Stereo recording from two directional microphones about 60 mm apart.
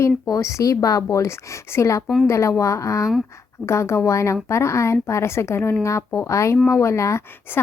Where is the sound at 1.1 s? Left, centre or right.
Left.